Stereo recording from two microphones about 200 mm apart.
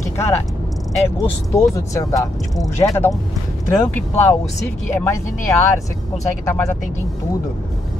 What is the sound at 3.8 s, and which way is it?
Speech, 10° left (ahead or behind).